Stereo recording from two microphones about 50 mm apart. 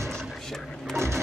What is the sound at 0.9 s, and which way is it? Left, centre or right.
Printer, right.